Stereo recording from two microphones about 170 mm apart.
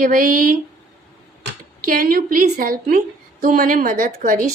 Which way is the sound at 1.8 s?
60° right (ahead or behind).